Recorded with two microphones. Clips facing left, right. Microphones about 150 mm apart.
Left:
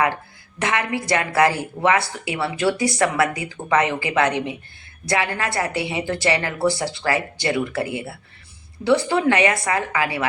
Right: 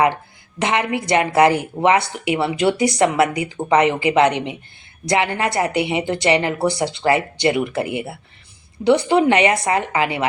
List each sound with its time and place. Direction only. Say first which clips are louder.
0.6 s a woman's voice: right 3 dB; 20° right (ahead or behind)